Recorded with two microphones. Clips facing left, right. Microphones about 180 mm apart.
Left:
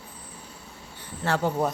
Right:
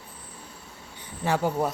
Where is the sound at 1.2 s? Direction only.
10° right (ahead or behind).